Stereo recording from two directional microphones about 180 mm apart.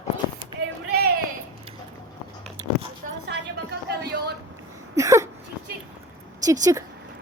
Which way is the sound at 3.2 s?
65° right (ahead or behind).